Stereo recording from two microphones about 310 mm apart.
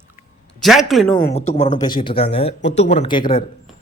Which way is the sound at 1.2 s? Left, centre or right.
Left.